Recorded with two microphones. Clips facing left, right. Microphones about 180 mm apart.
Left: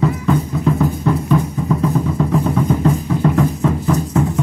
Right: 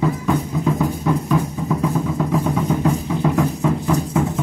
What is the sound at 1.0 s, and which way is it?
Music, 5° right (ahead or behind).